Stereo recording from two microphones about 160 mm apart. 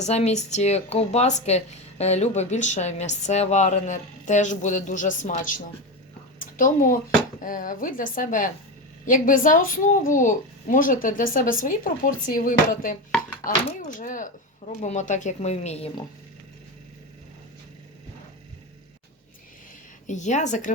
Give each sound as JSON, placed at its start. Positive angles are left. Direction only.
{"t": 0.0, "sound": "a woman's voice", "side_deg": 40}
{"t": 20.1, "sound": "speech", "side_deg": 50}